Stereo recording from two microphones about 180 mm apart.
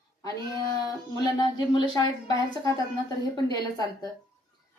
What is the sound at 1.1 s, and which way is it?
A woman's voice, 20° left (ahead or behind).